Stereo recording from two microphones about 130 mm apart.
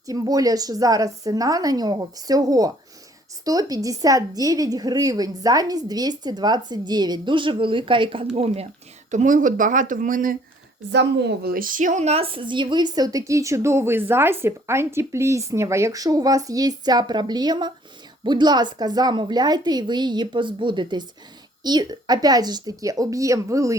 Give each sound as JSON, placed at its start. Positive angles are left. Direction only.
{"t": 0.0, "sound": "a woman's voice", "side_deg": -25}
{"t": 9.0, "sound": "speech", "side_deg": -75}
{"t": 11.5, "sound": "a woman's voice", "side_deg": -90}